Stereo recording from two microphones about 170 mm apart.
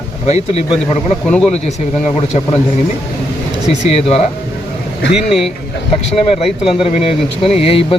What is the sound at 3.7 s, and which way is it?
Speech, 35° left (ahead or behind).